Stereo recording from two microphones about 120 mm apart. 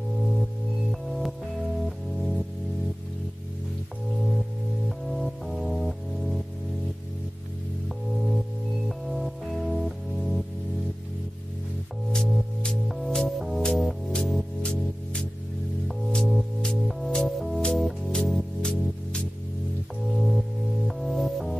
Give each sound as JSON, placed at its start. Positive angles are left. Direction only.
{"t": 1.0, "sound": "music", "side_deg": 0}
{"t": 4.8, "sound": "music", "side_deg": 0}
{"t": 8.8, "sound": "music", "side_deg": 0}
{"t": 12.1, "sound": "music", "side_deg": 0}